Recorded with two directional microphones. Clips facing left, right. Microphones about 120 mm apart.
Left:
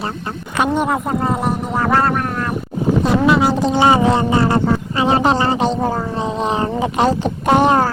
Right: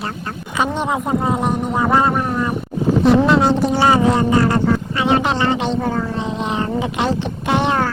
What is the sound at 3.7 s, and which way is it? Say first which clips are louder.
Speech: left 1 dB; 20° left (ahead or behind).